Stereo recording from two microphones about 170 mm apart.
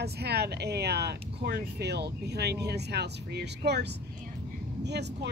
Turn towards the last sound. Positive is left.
turn(degrees=-80)